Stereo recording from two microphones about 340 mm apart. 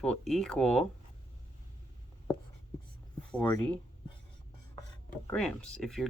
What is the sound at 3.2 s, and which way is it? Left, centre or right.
Speech, centre.